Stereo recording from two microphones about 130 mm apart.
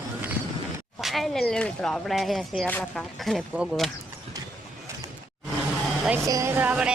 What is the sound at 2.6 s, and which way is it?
Speech, 10° left (ahead or behind).